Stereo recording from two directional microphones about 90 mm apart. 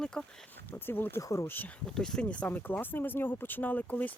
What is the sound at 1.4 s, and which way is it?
Speech, 20° left (ahead or behind).